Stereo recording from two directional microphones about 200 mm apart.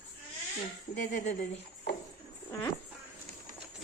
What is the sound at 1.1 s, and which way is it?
Speech, 35° left (ahead or behind).